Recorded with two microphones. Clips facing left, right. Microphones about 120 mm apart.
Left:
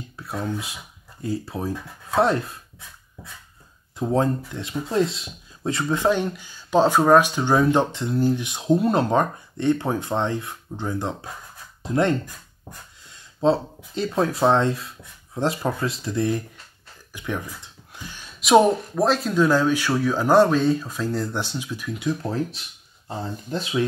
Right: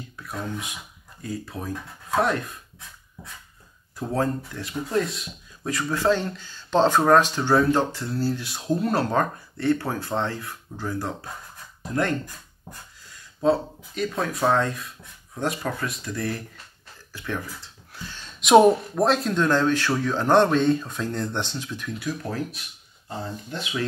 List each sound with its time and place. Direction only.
0.2 s speech: 30° left (ahead or behind)
4.1 s speech: 25° left (ahead or behind)
17.1 s a sound: 15° left (ahead or behind)
18.4 s speech: centre (ahead or behind)
22.0 s speech: 25° left (ahead or behind)